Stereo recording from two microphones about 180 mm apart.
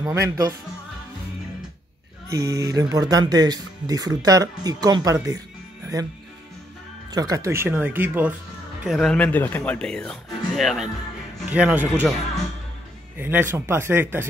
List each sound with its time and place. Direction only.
0.0 s speech: 20° right (ahead or behind)
2.2 s speech: 15° right (ahead or behind)
7.1 s speech: 20° right (ahead or behind)
8.8 s speech: centre (ahead or behind)
13.2 s speech: 10° right (ahead or behind)